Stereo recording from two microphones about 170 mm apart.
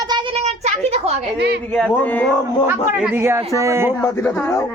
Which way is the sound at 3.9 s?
15° left (ahead or behind).